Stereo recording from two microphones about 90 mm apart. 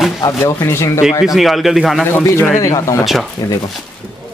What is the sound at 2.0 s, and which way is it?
Speech, 25° left (ahead or behind).